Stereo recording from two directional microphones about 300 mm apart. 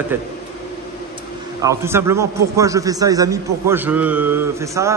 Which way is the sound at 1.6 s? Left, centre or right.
Centre.